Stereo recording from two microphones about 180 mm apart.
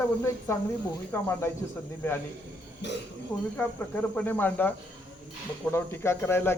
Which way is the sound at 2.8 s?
75° left (ahead or behind).